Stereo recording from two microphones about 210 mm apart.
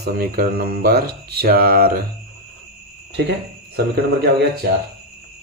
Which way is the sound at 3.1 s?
50° right (ahead or behind).